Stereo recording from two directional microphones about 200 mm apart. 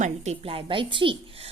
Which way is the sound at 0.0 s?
30° right (ahead or behind).